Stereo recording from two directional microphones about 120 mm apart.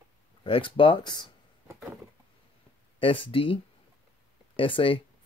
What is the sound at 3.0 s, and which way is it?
Speech, 45° left (ahead or behind).